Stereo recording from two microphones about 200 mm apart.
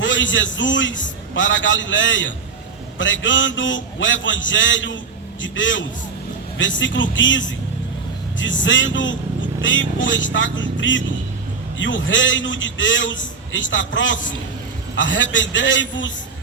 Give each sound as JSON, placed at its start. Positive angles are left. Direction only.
{"t": 0.0, "sound": "a man's voice", "side_deg": 70}